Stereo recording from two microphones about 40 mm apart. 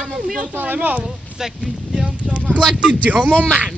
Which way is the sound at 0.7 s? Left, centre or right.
Right.